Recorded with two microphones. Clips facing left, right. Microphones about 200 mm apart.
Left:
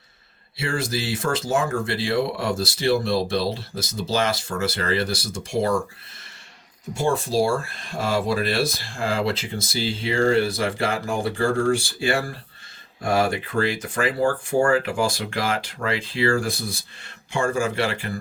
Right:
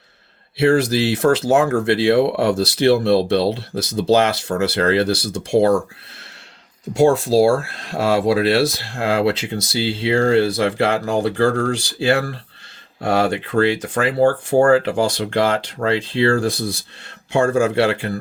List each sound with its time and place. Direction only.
0.5 s speech: 65° right (ahead or behind)
6.9 s speech: 70° right (ahead or behind)